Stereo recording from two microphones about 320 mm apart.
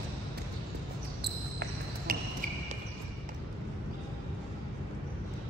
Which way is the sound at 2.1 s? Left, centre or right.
Right.